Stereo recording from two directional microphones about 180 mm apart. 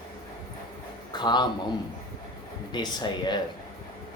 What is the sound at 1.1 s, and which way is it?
Speech, 25° left (ahead or behind).